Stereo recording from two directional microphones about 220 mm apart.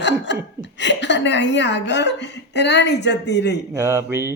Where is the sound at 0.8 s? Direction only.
55° left (ahead or behind).